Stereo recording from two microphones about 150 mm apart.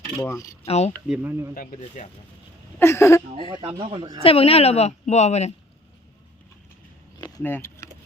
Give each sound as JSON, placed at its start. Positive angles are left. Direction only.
{"t": 0.2, "sound": "speech", "side_deg": 20}
{"t": 0.6, "sound": "a woman's voice", "side_deg": 45}
{"t": 1.0, "sound": "speech", "side_deg": -10}
{"t": 1.5, "sound": "speech", "side_deg": 70}
{"t": 2.7, "sound": "speech", "side_deg": 15}
{"t": 3.5, "sound": "speech", "side_deg": -35}
{"t": 4.2, "sound": "a woman's voice", "side_deg": 40}
{"t": 7.4, "sound": "speech", "side_deg": 15}